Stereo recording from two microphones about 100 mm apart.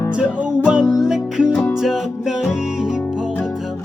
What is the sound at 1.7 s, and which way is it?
Music, centre (ahead or behind).